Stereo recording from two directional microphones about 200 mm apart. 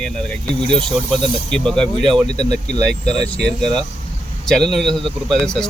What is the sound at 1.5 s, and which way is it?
Speech, 5° left (ahead or behind).